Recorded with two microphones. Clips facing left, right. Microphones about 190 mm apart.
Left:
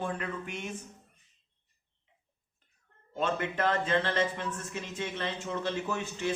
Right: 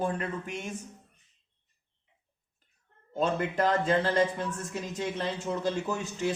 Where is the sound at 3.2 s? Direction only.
40° right (ahead or behind).